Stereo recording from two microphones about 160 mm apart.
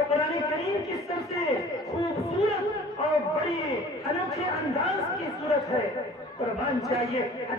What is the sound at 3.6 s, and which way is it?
Speech, 20° left (ahead or behind).